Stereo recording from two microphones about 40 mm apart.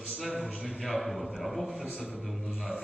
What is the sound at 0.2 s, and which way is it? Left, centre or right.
A man's voice, centre.